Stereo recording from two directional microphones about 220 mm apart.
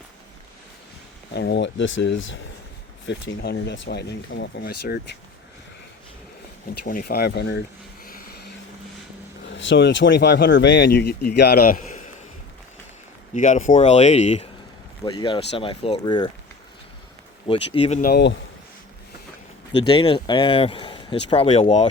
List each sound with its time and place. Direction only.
1.3 s speech: 50° left (ahead or behind)
6.8 s speech: 40° left (ahead or behind)
8.0 s vehicle: 40° left (ahead or behind)
9.5 s speech: 55° left (ahead or behind); by 12.1 s 35° left (ahead or behind)
13.3 s speech: 35° left (ahead or behind)
17.4 s speech: 25° left (ahead or behind)
18.0 s speech: 50° left (ahead or behind)
19.7 s speech: 20° left (ahead or behind)